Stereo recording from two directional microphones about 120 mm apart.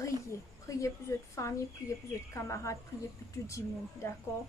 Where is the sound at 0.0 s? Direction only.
25° left (ahead or behind).